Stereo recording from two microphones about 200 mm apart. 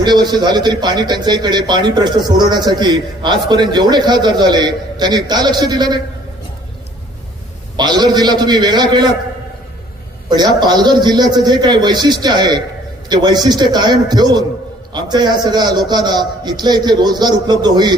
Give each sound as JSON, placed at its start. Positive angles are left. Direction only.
{"t": 0.0, "sound": "a man's voice", "side_deg": -20}
{"t": 7.8, "sound": "a man's voice", "side_deg": -20}
{"t": 10.2, "sound": "a man's voice", "side_deg": -20}